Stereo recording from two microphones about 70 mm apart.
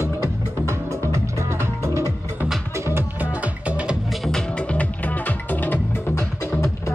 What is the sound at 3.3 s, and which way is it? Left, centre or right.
Music, right.